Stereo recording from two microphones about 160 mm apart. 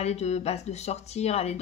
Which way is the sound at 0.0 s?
45° left (ahead or behind).